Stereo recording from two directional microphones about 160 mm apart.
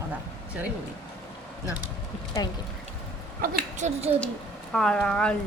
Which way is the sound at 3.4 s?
45° right (ahead or behind).